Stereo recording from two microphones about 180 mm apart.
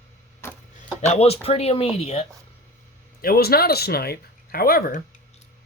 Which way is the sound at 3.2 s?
55° left (ahead or behind).